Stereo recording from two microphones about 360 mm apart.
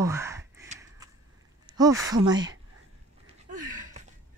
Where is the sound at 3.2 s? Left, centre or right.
Centre.